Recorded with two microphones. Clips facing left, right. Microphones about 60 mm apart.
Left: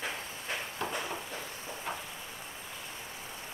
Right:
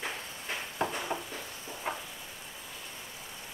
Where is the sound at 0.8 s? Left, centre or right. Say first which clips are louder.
Right 6 dB; right.